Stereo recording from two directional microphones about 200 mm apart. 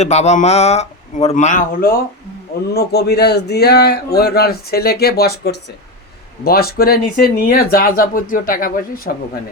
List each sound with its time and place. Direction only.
0.0 s speech: 35° left (ahead or behind)
2.7 s a man's voice: 55° left (ahead or behind)